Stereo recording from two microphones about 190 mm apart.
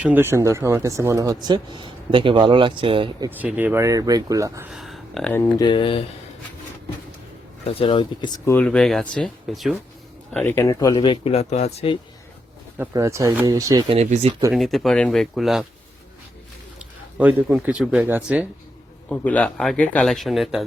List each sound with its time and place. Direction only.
0.0 s speech: 10° right (ahead or behind); by 3.2 s 25° right (ahead or behind)
3.2 s speech: 10° right (ahead or behind)
4.7 s speech: centre (ahead or behind); by 6.1 s 25° left (ahead or behind)
7.6 s speech: 30° left (ahead or behind)
8.4 s a man's voice: 5° left (ahead or behind)
10.3 s speech: 10° left (ahead or behind); by 11.9 s 35° left (ahead or behind)
12.7 s speech: 15° right (ahead or behind)
13.8 s speech: 35° right (ahead or behind)
14.5 s a man's voice: centre (ahead or behind)
16.7 s speech: 5° right (ahead or behind)
19.0 s a man's voice: 10° left (ahead or behind)